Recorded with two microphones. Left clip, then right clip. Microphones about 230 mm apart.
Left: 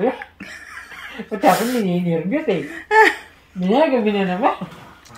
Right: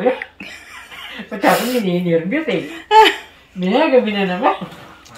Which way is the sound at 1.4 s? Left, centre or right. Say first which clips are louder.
Right 1 dB; left.